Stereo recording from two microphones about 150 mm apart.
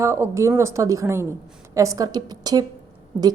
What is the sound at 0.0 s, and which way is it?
A woman's voice, 20° right (ahead or behind).